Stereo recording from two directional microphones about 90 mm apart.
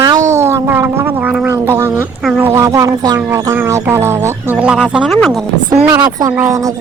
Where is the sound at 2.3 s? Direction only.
25° right (ahead or behind).